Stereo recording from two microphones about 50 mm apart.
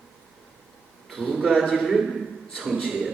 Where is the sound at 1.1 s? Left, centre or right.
Centre.